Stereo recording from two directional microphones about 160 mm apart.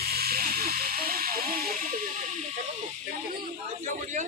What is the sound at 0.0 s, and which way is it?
Hiss, 70° right (ahead or behind).